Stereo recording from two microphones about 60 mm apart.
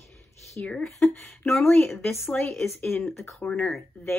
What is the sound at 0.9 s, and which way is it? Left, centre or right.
Speech, left.